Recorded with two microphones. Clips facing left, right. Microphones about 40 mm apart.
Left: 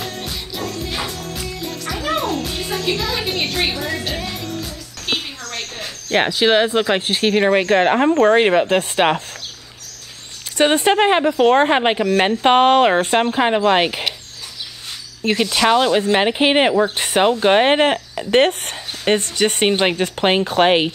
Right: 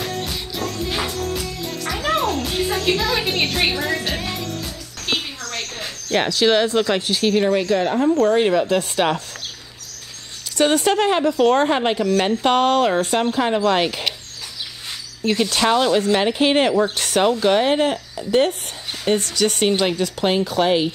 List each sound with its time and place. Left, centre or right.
0.2 s music: centre
5.1 s a sound: centre
6.0 s speech: left
10.6 s speech: left
15.2 s speech: left